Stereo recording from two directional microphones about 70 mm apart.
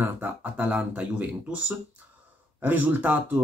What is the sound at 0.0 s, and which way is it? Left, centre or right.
Speech, right.